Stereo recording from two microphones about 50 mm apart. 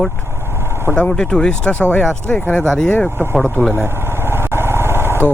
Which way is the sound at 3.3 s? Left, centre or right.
Centre.